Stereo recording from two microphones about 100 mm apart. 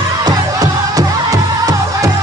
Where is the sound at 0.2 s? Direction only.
35° right (ahead or behind).